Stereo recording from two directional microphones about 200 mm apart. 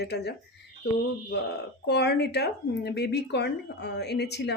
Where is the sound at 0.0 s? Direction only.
55° left (ahead or behind).